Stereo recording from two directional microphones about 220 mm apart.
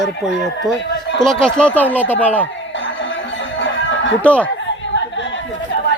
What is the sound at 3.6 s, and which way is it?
Chicken, 55° left (ahead or behind).